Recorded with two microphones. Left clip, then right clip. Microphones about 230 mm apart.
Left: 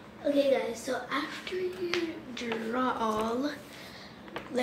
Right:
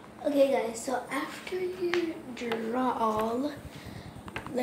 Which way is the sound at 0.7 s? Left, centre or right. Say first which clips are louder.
Even; right.